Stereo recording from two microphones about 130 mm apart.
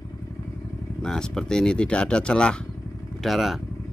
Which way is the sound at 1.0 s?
5° left (ahead or behind).